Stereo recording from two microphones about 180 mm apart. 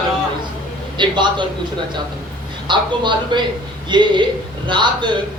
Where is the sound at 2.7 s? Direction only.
25° right (ahead or behind).